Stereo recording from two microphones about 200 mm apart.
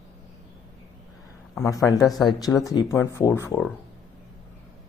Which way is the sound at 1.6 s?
15° left (ahead or behind).